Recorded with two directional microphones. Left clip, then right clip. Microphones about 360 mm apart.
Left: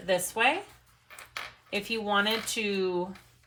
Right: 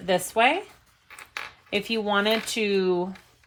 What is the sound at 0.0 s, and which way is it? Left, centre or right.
Speech, right.